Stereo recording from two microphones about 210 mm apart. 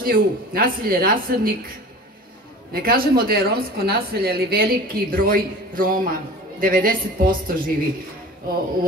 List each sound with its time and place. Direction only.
0.0 s speech: 45° right (ahead or behind)
2.7 s speech: 45° right (ahead or behind)